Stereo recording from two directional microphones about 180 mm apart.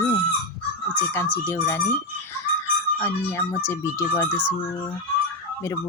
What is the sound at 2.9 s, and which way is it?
Speech, 15° left (ahead or behind).